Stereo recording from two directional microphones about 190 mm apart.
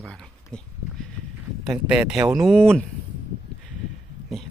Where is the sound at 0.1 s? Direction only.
5° left (ahead or behind).